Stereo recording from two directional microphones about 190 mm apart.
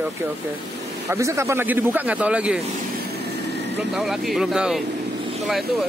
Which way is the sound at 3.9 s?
Centre (ahead or behind).